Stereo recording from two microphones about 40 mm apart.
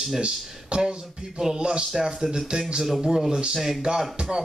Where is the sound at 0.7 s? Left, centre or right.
Right.